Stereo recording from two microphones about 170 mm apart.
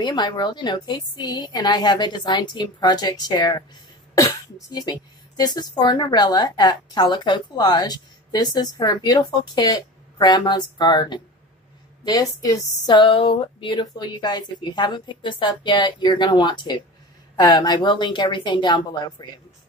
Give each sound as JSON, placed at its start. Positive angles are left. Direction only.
{"t": 0.0, "sound": "a woman's voice", "side_deg": 25}